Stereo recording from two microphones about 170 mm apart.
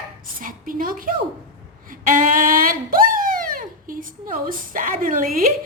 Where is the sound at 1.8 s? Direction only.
50° right (ahead or behind).